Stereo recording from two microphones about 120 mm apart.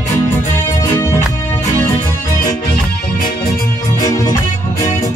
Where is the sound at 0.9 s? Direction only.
25° left (ahead or behind).